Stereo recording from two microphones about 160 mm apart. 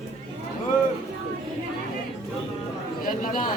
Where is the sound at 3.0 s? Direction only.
55° left (ahead or behind).